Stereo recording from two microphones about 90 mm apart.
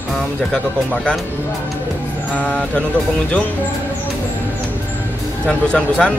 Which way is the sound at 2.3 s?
15° left (ahead or behind).